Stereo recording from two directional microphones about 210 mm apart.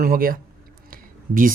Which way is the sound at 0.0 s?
45° right (ahead or behind).